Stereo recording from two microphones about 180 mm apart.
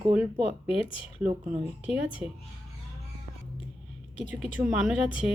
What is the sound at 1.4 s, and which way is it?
Speech, 5° right (ahead or behind).